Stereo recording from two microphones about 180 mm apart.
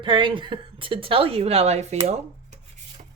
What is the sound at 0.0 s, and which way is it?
A woman's voice, 25° right (ahead or behind).